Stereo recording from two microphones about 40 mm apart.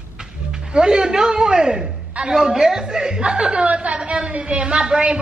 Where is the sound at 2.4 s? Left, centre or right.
Centre.